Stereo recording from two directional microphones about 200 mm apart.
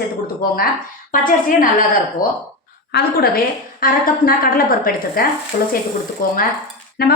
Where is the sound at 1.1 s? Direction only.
45° left (ahead or behind).